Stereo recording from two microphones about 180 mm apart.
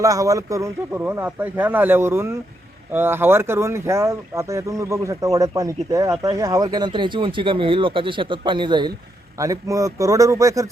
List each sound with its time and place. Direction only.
0.0 s speech: 20° right (ahead or behind)